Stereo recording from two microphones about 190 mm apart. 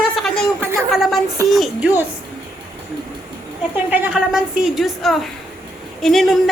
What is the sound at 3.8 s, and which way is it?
A woman's voice, 5° right (ahead or behind).